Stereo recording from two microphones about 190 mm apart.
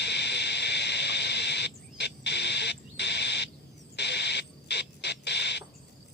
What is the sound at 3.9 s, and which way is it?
Bird, 60° left (ahead or behind).